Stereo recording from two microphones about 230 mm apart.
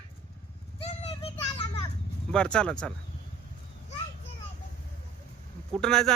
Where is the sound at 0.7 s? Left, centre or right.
Left.